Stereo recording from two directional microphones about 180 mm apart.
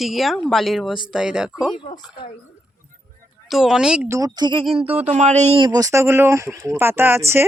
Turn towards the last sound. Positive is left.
turn(degrees=-15)  # may be behind; listen again after turning